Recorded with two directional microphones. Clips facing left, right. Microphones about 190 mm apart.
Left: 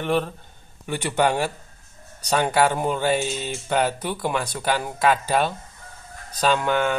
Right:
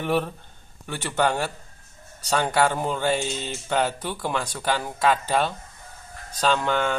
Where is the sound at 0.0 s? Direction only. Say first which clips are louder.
Left 1 dB; 5° right (ahead or behind).